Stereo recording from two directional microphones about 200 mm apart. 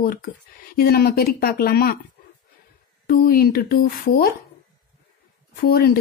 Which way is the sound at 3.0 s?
45° left (ahead or behind).